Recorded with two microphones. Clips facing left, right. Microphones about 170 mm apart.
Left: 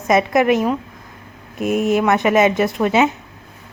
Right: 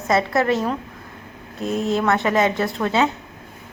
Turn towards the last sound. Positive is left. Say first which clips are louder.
# left 4 dB
turn(degrees=15)  # may be behind; listen again after turning